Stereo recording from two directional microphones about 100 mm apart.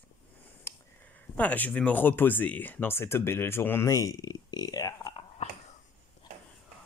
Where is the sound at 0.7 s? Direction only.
25° left (ahead or behind).